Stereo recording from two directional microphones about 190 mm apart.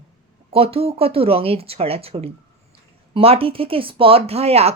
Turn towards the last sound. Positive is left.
turn(degrees=-30)  # may be behind; listen again after turning